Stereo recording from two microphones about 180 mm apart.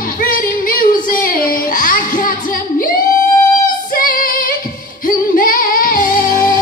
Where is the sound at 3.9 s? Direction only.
50° left (ahead or behind).